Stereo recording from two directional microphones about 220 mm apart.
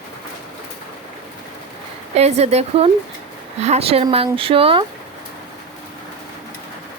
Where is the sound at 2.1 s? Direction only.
30° right (ahead or behind).